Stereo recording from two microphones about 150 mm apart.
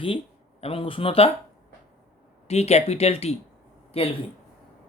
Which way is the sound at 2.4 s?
45° left (ahead or behind).